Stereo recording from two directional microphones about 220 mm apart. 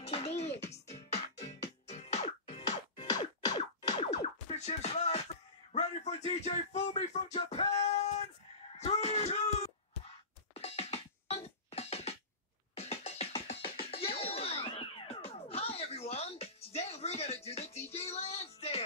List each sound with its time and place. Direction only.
0.0 s music: 25° left (ahead or behind)
1.9 s music: 30° left (ahead or behind)
4.2 s music: 30° left (ahead or behind)